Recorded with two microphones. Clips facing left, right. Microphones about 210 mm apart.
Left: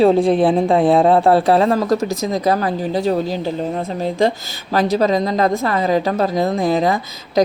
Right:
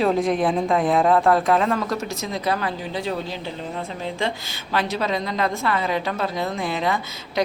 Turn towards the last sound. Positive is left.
turn(degrees=40)  # may be behind; listen again after turning